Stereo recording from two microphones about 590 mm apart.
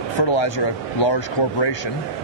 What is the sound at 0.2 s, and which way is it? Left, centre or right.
A man's voice, left.